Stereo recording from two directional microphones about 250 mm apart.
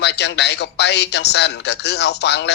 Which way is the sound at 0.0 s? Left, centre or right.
Left.